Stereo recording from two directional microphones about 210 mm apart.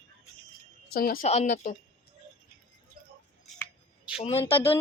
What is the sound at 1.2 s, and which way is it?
Speech, 30° left (ahead or behind).